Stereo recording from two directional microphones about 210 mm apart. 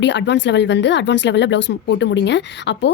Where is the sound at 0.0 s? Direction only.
55° left (ahead or behind).